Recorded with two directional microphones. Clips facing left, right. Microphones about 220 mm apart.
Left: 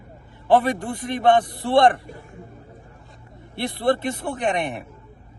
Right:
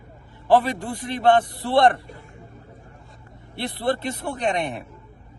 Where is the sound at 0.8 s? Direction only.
20° left (ahead or behind).